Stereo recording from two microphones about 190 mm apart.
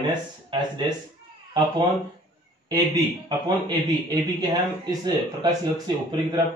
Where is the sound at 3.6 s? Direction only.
20° right (ahead or behind).